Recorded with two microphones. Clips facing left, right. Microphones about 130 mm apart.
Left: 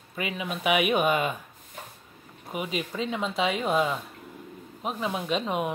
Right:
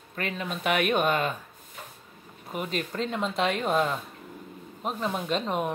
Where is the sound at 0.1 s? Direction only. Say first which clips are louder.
Even; 10° left (ahead or behind).